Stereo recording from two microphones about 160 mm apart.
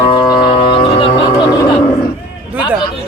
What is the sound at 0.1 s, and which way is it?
Music, 30° left (ahead or behind).